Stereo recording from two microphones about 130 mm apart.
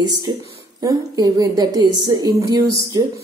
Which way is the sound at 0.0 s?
30° right (ahead or behind).